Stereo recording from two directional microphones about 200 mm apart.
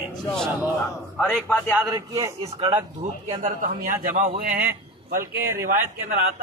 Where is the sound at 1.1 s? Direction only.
Centre (ahead or behind).